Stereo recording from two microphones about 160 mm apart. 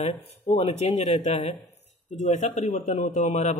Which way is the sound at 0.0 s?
45° left (ahead or behind).